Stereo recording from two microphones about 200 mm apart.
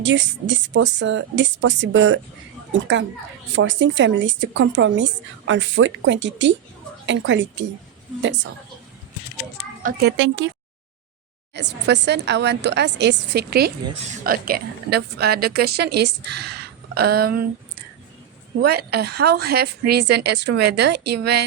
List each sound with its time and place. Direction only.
0.0 s a woman's voice: 65° right (ahead or behind)
9.8 s a woman's voice: 60° right (ahead or behind)
11.5 s a woman's voice: 60° right (ahead or behind)
18.6 s a woman's voice: 50° right (ahead or behind)